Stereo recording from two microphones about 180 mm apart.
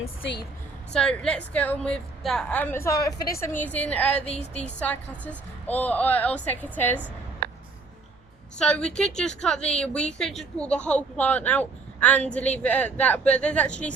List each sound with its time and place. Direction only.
0.9 s a woman's voice: 5° left (ahead or behind)
3.6 s a woman's voice: 10° left (ahead or behind)
4.3 s speech: 35° left (ahead or behind)
4.8 s a woman's voice: 10° left (ahead or behind)
8.5 s a woman's voice: 5° left (ahead or behind)